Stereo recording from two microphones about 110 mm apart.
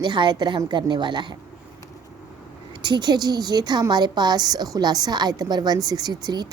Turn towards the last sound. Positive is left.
turn(degrees=-40)  # may be behind; listen again after turning